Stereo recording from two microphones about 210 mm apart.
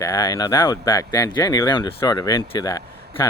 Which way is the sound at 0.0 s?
15° left (ahead or behind).